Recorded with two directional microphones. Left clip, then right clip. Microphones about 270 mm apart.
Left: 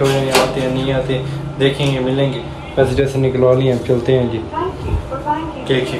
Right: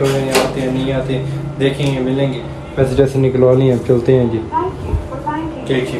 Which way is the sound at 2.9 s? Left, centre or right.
Centre.